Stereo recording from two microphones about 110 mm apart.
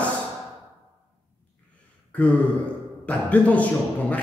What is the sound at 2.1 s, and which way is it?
Speech, 10° left (ahead or behind).